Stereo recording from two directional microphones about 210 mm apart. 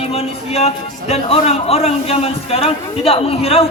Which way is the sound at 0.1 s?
30° left (ahead or behind).